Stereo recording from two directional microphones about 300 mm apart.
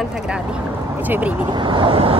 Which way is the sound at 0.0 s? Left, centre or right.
Centre.